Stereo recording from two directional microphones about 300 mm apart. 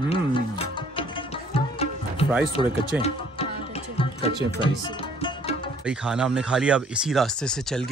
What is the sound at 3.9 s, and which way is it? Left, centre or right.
Music, centre.